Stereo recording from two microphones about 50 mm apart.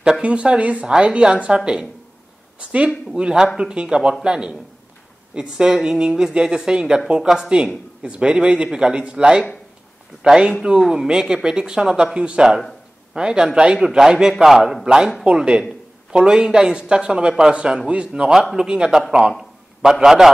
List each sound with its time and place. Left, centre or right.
0.2 s speech: right
3.2 s a man's voice: centre
18.4 s a man's voice: centre